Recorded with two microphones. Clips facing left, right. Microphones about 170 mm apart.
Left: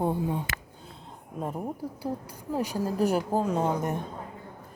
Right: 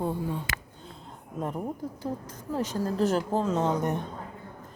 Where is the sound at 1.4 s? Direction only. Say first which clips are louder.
Even; 10° left (ahead or behind).